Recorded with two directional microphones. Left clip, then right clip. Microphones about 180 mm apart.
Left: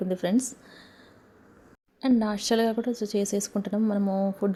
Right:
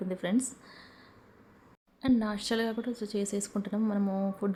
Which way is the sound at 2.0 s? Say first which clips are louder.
Left 4 dB; 20° left (ahead or behind).